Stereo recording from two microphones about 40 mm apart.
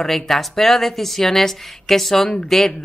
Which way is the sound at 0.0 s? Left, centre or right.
Centre.